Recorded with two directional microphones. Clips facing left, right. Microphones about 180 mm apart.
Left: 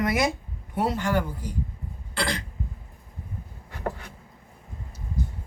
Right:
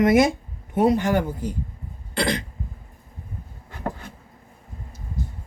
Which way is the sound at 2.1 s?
20° right (ahead or behind).